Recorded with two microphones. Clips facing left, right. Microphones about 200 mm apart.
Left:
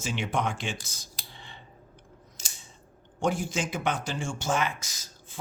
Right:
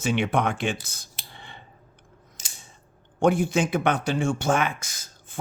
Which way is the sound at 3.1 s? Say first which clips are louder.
Right 7 dB; 60° right (ahead or behind).